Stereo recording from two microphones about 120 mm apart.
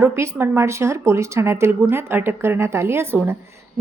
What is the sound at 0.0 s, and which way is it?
Speech, 25° right (ahead or behind).